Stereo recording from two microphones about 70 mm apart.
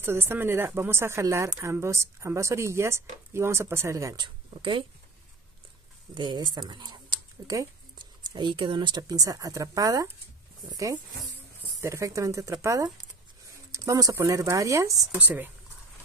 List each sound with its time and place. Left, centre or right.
0.0 s speech: right
6.1 s speech: right
8.2 s speech: right
13.7 s a sound: right
14.1 s speech: right
15.1 s speech: right